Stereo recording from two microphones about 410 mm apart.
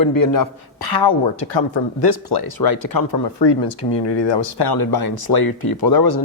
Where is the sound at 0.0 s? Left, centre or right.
Left.